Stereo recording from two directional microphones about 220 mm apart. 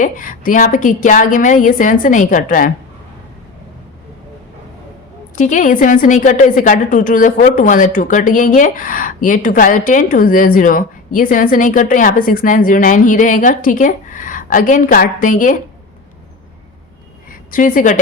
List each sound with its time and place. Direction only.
0.0 s a woman's voice: 35° left (ahead or behind)
5.4 s a woman's voice: 35° left (ahead or behind)
17.5 s a woman's voice: 35° left (ahead or behind)